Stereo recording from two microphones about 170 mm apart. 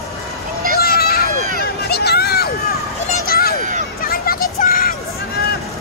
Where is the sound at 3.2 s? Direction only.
65° left (ahead or behind).